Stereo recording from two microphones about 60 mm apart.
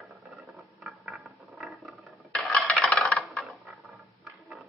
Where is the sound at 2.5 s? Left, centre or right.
Centre.